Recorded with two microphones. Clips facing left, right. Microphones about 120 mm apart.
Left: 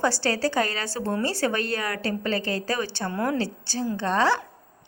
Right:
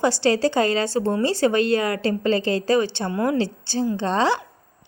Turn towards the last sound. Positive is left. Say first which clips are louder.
# right 2 dB
turn(degrees=-20)  # may be behind; listen again after turning